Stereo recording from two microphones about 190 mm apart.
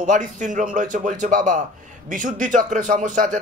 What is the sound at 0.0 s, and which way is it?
A man's voice, 40° right (ahead or behind).